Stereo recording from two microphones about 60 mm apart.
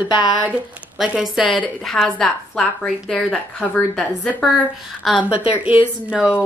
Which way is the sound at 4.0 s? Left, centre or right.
Left.